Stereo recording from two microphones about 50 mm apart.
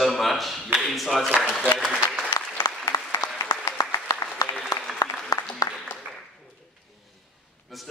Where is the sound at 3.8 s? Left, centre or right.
Left.